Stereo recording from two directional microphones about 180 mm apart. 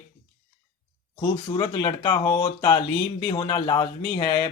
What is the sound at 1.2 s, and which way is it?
Speech, 25° left (ahead or behind).